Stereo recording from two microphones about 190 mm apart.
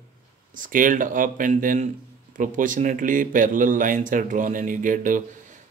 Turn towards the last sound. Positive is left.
turn(degrees=-45)  # may be behind; listen again after turning